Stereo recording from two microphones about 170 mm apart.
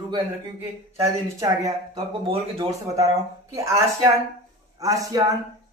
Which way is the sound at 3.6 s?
15° right (ahead or behind).